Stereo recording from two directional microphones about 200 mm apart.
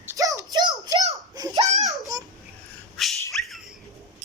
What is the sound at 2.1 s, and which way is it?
Babbling, 20° right (ahead or behind).